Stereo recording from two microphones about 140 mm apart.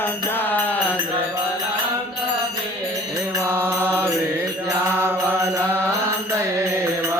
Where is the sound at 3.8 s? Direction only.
15° right (ahead or behind).